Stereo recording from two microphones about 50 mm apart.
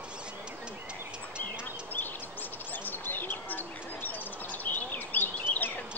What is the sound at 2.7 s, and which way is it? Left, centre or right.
Bird, left.